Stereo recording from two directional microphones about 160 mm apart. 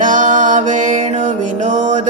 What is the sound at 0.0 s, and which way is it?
Music, 50° right (ahead or behind).